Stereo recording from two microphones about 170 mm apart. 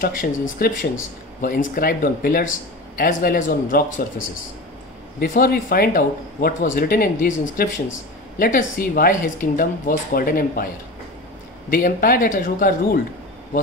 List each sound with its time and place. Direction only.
0.0 s speech: 55° left (ahead or behind)
5.2 s speech: 60° left (ahead or behind)
11.7 s speech: 60° left (ahead or behind)